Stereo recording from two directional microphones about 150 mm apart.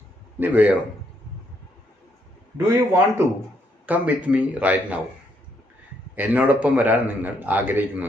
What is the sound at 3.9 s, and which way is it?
A man's voice, 10° right (ahead or behind).